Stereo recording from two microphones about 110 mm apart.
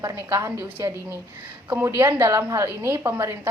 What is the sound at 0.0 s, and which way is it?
A woman's voice, 25° right (ahead or behind).